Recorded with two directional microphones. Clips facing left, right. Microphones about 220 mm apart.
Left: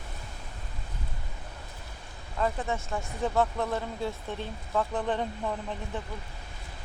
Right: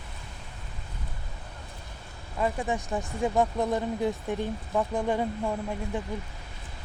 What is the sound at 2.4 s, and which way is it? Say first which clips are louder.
Speech: right 2 dB; 15° right (ahead or behind).